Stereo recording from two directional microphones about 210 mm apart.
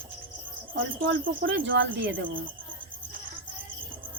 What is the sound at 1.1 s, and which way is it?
Speech, 60° right (ahead or behind).